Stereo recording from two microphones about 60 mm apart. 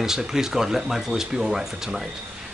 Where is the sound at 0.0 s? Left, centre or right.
Centre.